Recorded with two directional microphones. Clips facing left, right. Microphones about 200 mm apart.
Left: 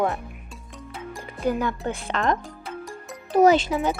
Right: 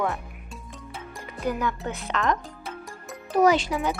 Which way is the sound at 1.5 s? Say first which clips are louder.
Left 3 dB; 30° left (ahead or behind).